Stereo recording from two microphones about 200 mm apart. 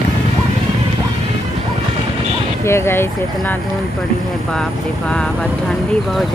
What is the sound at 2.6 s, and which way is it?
Speech, 15° left (ahead or behind).